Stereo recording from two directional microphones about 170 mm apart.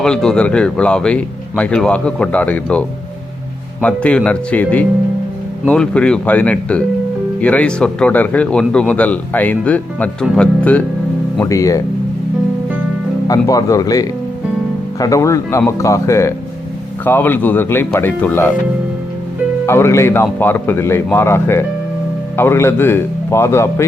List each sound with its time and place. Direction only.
0.0 s a man's voice: 5° left (ahead or behind)
11.4 s speech: 20° left (ahead or behind)
13.2 s speech: 20° left (ahead or behind)
19.6 s speech: 15° left (ahead or behind)